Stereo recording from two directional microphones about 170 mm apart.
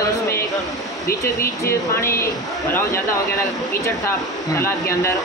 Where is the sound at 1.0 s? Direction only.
15° left (ahead or behind).